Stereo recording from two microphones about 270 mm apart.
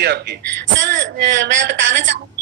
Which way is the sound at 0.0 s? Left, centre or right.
Right.